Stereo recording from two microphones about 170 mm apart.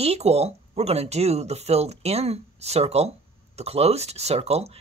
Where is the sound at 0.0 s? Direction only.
35° right (ahead or behind).